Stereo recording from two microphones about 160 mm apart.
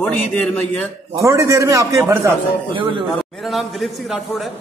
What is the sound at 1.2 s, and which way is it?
A man's voice, 20° right (ahead or behind).